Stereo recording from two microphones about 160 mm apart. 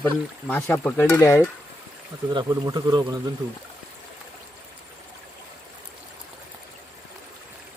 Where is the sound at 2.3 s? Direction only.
25° right (ahead or behind).